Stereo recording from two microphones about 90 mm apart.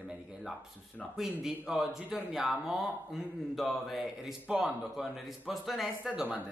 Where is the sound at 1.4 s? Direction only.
5° right (ahead or behind).